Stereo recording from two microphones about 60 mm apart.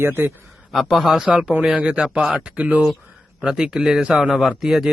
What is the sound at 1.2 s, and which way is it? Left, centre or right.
Speech, centre.